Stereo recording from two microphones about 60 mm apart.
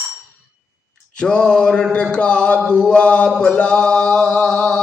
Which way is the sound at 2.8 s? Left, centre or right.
Centre.